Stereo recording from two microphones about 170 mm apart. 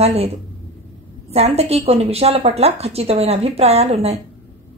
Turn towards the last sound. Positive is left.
turn(degrees=-40)  # may be behind; listen again after turning